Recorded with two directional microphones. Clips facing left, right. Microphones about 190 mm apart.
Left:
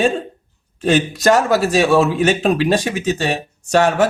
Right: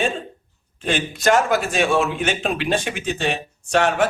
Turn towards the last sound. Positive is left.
turn(degrees=40)  # may be behind; listen again after turning